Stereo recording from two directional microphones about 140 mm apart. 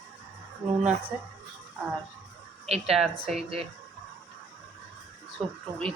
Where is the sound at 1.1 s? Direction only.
Centre (ahead or behind).